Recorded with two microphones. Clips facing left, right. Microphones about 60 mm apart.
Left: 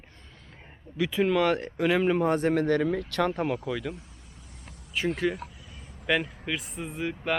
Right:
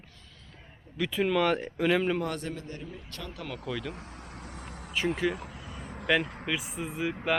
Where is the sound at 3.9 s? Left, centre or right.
Right.